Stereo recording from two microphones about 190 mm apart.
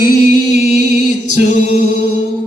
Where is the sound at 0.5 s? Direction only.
60° right (ahead or behind).